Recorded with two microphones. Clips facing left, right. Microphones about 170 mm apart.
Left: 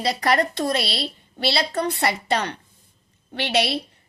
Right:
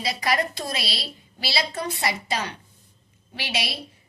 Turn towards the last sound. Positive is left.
turn(degrees=60)  # may be behind; listen again after turning